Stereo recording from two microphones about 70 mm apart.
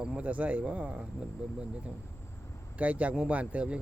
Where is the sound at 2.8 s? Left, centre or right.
Centre.